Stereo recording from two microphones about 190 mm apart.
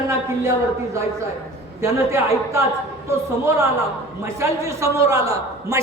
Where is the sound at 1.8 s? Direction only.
15° right (ahead or behind).